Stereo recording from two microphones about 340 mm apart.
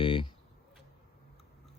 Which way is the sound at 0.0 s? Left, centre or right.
Centre.